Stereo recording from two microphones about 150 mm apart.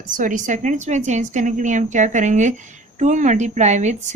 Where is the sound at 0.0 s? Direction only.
60° right (ahead or behind).